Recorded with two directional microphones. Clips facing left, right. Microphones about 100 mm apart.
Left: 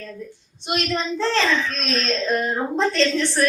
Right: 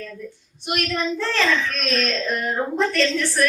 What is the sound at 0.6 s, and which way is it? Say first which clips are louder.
A woman's voice: even; 25° left (ahead or behind).